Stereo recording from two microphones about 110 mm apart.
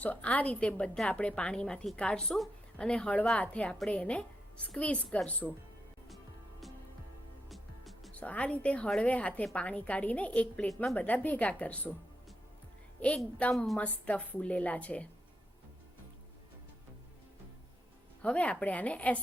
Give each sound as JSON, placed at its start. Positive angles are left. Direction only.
{"t": 0.0, "sound": "a woman's voice", "side_deg": 10}
{"t": 7.5, "sound": "music", "side_deg": 0}
{"t": 8.1, "sound": "a woman's voice", "side_deg": 15}
{"t": 13.0, "sound": "a woman's voice", "side_deg": 10}
{"t": 18.2, "sound": "a woman's voice", "side_deg": 15}